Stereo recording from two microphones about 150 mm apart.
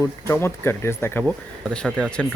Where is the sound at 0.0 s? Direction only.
15° left (ahead or behind).